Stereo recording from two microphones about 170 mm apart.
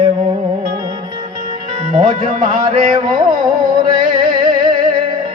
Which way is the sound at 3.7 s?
30° right (ahead or behind).